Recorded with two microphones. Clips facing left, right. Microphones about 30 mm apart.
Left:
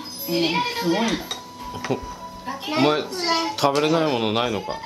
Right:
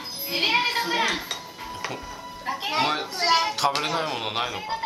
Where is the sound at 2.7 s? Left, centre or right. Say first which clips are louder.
Left 6 dB; centre.